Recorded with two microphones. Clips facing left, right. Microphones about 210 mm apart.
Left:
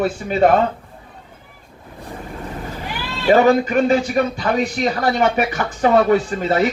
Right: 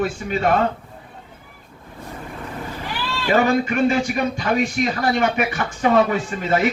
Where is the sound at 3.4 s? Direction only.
35° left (ahead or behind).